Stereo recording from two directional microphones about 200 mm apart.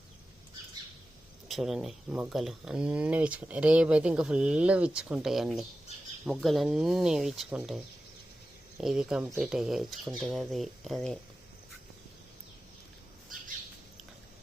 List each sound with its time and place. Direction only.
1.5 s speech: centre (ahead or behind)
8.8 s speech: centre (ahead or behind)